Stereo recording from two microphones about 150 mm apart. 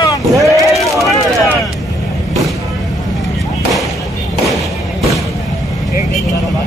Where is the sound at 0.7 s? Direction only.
Centre (ahead or behind).